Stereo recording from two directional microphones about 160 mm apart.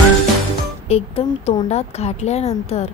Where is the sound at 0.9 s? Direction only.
40° left (ahead or behind).